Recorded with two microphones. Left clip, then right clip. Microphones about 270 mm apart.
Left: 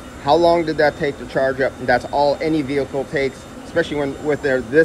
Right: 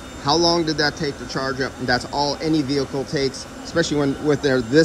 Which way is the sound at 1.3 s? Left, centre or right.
Centre.